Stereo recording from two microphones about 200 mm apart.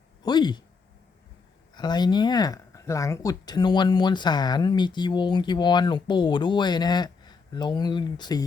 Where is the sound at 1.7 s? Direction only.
20° left (ahead or behind).